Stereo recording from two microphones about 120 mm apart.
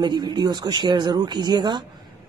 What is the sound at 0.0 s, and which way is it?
Speech, 40° right (ahead or behind).